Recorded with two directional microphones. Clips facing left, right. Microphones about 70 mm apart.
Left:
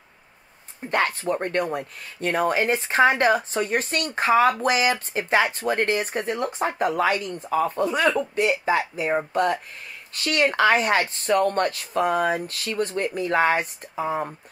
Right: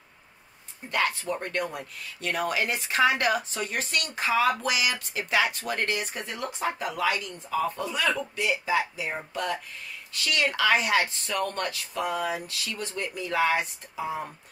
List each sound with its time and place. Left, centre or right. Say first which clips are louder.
0.8 s speech: left 4 dB; left